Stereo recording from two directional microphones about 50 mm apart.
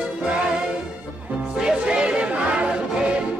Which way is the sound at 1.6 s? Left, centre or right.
Centre.